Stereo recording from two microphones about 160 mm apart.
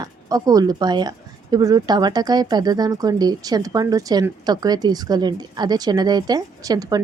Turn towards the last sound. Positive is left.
turn(degrees=-25)  # may be behind; listen again after turning